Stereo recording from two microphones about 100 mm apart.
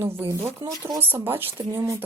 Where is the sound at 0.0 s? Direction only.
25° right (ahead or behind).